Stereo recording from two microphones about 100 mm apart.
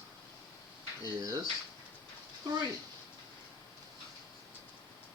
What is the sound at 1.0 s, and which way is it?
Speech, 40° right (ahead or behind).